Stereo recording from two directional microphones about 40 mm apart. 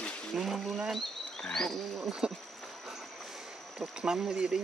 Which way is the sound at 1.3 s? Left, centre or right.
Centre.